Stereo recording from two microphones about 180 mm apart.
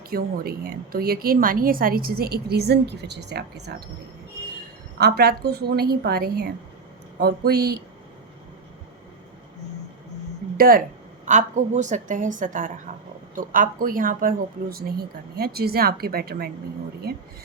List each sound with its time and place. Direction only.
0.1 s a woman's voice: 55° right (ahead or behind)
4.9 s a woman's voice: 60° right (ahead or behind)
10.6 s a woman's voice: 55° right (ahead or behind)
11.3 s a woman's voice: 40° right (ahead or behind); by 16.5 s 60° right (ahead or behind)